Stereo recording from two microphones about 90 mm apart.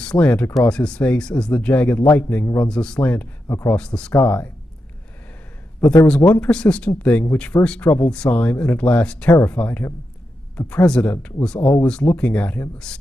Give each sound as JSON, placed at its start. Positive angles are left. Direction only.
{"t": 0.0, "sound": "speech", "side_deg": 10}
{"t": 6.0, "sound": "speech", "side_deg": 10}